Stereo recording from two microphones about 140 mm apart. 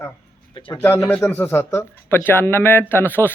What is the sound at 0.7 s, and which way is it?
Speech, 20° left (ahead or behind).